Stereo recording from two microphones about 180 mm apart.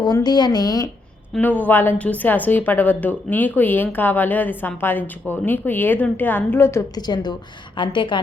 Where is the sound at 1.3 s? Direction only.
10° left (ahead or behind).